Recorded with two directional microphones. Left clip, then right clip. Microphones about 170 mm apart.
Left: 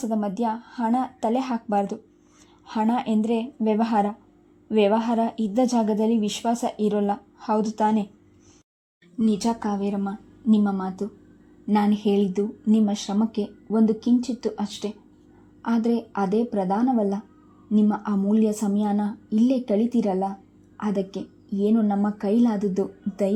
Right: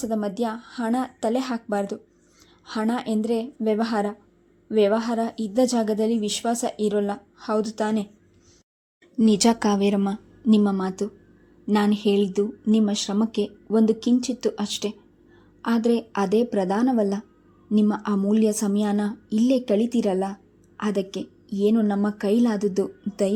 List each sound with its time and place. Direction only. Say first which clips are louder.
0.0 s a woman's voice: even; 10° left (ahead or behind)
9.1 s speech: right 5 dB; 15° right (ahead or behind)
10.4 s a woman's voice: right 2 dB; 5° right (ahead or behind)